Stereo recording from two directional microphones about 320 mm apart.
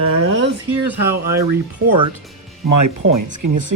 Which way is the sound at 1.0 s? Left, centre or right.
Centre.